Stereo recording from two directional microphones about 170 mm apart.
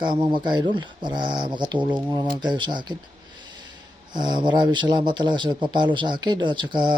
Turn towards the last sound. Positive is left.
turn(degrees=-25)  # may be behind; listen again after turning